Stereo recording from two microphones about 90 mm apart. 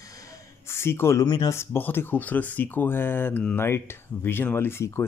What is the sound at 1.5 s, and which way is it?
Speech, 25° left (ahead or behind).